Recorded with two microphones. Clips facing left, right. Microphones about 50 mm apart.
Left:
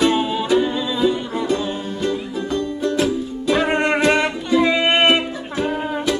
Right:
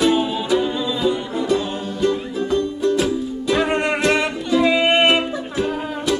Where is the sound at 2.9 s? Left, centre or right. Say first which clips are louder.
Even; centre.